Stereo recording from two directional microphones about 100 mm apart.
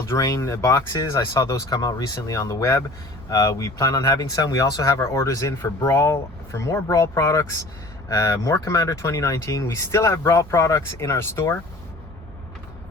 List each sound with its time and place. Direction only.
0.1 s speech: 35° left (ahead or behind)